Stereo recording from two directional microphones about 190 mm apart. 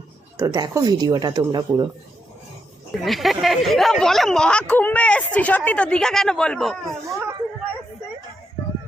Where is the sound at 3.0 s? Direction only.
Centre (ahead or behind).